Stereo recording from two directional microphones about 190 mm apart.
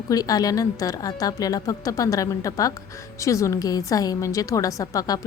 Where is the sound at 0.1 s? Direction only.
20° left (ahead or behind).